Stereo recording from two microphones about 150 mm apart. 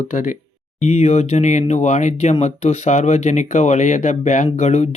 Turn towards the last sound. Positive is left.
turn(degrees=50)  # may be behind; listen again after turning